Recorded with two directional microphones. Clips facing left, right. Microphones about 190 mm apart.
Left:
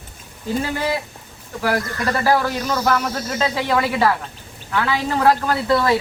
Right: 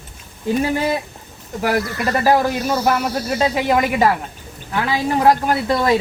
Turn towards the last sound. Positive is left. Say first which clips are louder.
# right 1 dB
turn(degrees=-20)  # may be behind; listen again after turning